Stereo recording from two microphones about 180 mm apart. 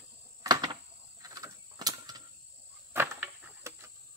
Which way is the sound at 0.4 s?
25° right (ahead or behind).